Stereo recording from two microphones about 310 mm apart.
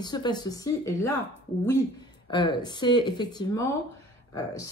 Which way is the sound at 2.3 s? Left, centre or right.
Centre.